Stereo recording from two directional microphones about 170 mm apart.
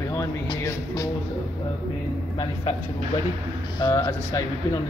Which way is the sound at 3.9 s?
20° left (ahead or behind).